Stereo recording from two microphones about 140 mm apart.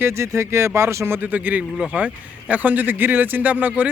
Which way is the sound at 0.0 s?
20° right (ahead or behind).